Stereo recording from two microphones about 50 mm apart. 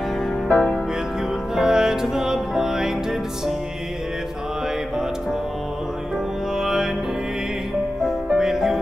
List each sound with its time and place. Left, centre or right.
0.5 s music: left
1.5 s music: centre
6.6 s music: centre
8.4 s music: centre